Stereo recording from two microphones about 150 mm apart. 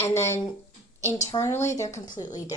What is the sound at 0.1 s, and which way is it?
Speech, 15° left (ahead or behind).